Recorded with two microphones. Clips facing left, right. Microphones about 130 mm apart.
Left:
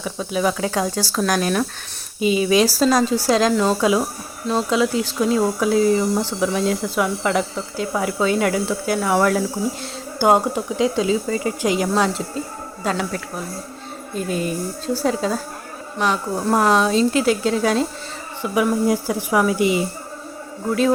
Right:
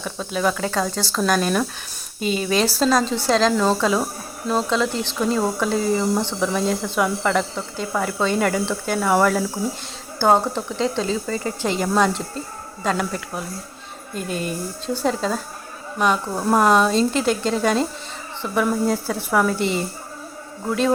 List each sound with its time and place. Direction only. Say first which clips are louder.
0.0 s speech: left 1 dB; 5° left (ahead or behind)
10.2 s speech: left 1 dB; 15° left (ahead or behind)
16.0 s speech: even; 5° right (ahead or behind)